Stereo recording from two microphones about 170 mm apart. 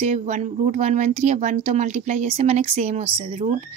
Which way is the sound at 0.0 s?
40° right (ahead or behind).